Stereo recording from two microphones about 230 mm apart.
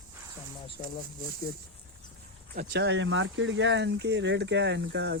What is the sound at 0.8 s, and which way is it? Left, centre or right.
Speech, left.